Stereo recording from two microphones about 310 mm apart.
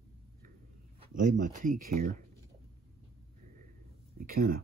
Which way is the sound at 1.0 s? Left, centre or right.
Right.